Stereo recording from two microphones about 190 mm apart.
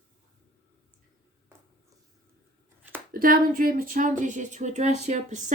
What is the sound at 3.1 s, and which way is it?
Speech, 50° right (ahead or behind).